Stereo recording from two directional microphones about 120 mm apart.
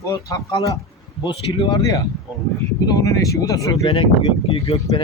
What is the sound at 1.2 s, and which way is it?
Speech, 40° left (ahead or behind).